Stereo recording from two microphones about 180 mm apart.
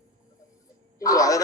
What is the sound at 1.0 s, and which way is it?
Speech, 20° left (ahead or behind).